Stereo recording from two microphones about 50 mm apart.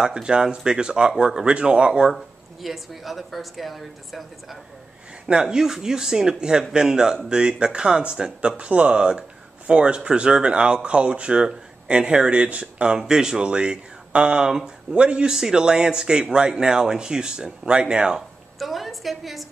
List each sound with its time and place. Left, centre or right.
0.0 s speech: centre
5.3 s speech: centre
12.9 s speech: centre
18.6 s a woman's voice: centre